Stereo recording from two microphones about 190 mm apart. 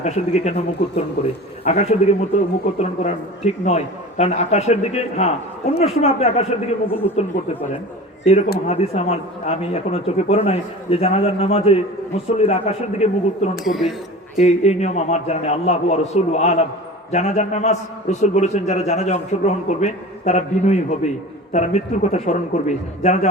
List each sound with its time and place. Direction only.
0.0 s a man's voice: 35° left (ahead or behind)
8.2 s a man's voice: 35° left (ahead or behind)
13.7 s speech: centre (ahead or behind)
14.3 s a man's voice: 35° left (ahead or behind)